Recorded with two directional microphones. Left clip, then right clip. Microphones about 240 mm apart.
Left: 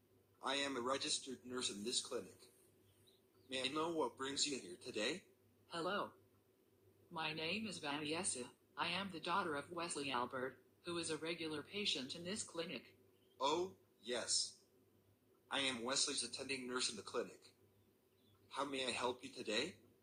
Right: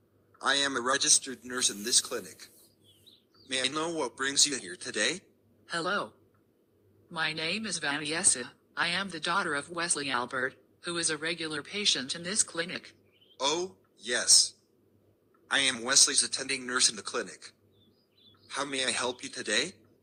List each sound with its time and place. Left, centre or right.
0.3 s a man's voice: centre
3.4 s a woman's voice: centre
7.1 s a woman's voice: centre
15.4 s a woman's voice: centre